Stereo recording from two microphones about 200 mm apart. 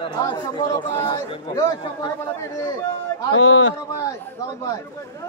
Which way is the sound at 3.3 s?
75° left (ahead or behind).